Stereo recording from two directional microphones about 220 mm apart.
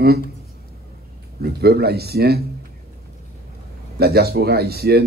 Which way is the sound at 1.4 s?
45° right (ahead or behind).